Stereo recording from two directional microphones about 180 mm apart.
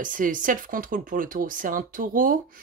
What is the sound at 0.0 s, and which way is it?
Speech, 50° right (ahead or behind).